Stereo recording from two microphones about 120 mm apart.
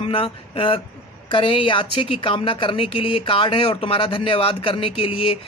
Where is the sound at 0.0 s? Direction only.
50° left (ahead or behind).